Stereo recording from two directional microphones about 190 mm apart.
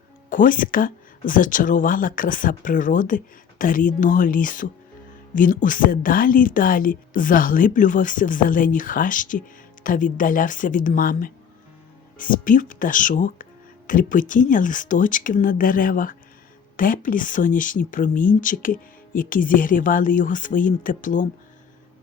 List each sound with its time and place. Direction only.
0.3 s speech: 45° left (ahead or behind)